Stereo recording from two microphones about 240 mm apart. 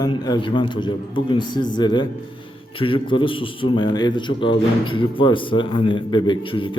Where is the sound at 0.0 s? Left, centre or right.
Centre.